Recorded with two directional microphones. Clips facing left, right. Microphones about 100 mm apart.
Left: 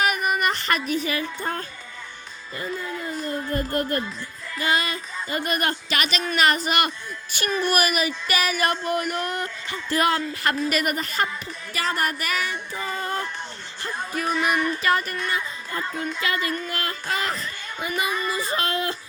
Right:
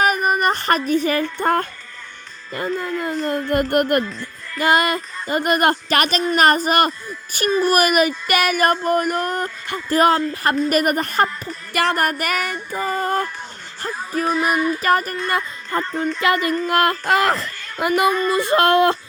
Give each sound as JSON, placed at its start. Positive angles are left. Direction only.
{"t": 0.0, "sound": "a sound", "side_deg": -40}
{"t": 1.2, "sound": "child singing", "side_deg": -60}
{"t": 2.7, "sound": "child singing", "side_deg": -60}
{"t": 3.2, "sound": "speech", "side_deg": -70}
{"t": 4.6, "sound": "speech", "side_deg": -50}
{"t": 10.7, "sound": "speech", "side_deg": -45}
{"t": 11.7, "sound": "child singing", "side_deg": -60}
{"t": 12.2, "sound": "speech", "side_deg": -50}
{"t": 13.8, "sound": "music", "side_deg": -40}
{"t": 14.3, "sound": "music", "side_deg": 0}
{"t": 14.8, "sound": "speech", "side_deg": -45}
{"t": 16.6, "sound": "speech", "side_deg": -65}
{"t": 18.1, "sound": "music", "side_deg": 5}
{"t": 18.3, "sound": "child singing", "side_deg": -70}